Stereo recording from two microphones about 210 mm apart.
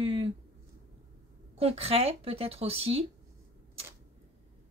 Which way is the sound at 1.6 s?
30° right (ahead or behind).